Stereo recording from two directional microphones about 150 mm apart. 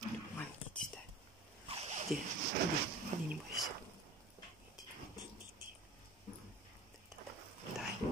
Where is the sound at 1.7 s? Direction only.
40° right (ahead or behind).